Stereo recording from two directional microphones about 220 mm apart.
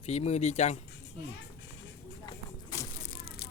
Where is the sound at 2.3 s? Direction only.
15° left (ahead or behind).